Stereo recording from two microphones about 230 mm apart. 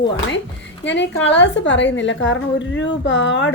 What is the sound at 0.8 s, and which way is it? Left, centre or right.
A woman's voice, left.